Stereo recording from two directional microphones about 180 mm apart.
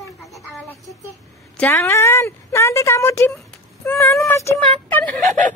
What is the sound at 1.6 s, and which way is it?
A woman's voice, 15° left (ahead or behind).